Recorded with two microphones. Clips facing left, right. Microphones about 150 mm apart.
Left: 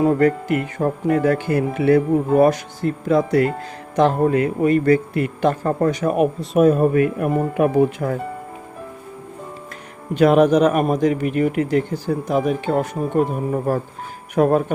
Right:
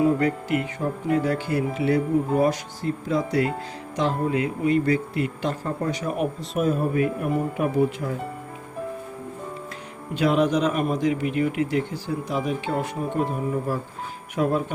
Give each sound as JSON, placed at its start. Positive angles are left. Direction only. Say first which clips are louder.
{"t": 0.0, "sound": "a man's voice", "louder": "left 5 dB", "side_deg": 50}
{"t": 10.2, "sound": "speech", "louder": "left 7 dB", "side_deg": 50}